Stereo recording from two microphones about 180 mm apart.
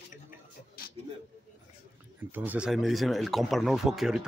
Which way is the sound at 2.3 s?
10° right (ahead or behind).